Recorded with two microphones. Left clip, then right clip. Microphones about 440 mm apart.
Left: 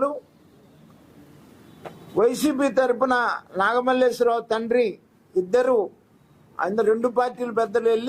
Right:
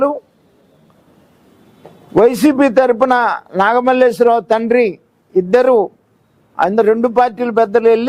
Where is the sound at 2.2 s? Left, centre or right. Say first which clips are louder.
Right 10 dB; right.